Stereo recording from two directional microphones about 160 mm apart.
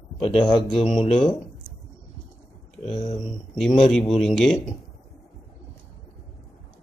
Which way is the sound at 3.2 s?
Centre (ahead or behind).